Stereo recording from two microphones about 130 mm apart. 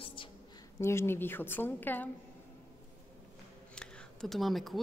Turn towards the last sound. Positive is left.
turn(degrees=0)  # may be behind; listen again after turning